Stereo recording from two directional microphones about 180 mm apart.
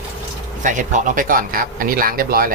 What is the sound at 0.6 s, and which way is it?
Speech, 45° right (ahead or behind).